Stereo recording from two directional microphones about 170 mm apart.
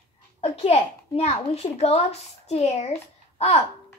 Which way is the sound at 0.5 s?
35° left (ahead or behind).